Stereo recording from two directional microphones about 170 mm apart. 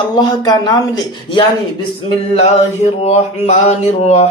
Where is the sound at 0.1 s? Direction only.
25° left (ahead or behind).